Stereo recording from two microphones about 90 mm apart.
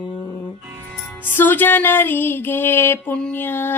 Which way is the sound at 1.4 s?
25° left (ahead or behind).